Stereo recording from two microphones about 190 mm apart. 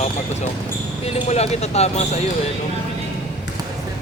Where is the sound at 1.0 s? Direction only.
35° left (ahead or behind).